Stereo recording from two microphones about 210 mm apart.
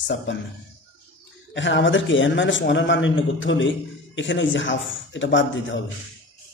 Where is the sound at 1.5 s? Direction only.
60° left (ahead or behind).